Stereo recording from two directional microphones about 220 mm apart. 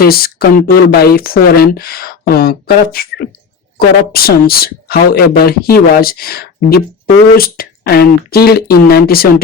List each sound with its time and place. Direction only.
0.0 s speech: 45° left (ahead or behind)